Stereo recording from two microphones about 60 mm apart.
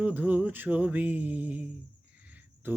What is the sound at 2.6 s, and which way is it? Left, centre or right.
Cricket, right.